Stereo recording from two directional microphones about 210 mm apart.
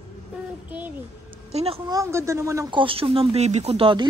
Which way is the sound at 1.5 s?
30° right (ahead or behind).